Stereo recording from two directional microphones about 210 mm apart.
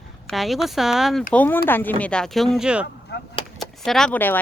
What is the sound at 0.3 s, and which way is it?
Speech, centre (ahead or behind).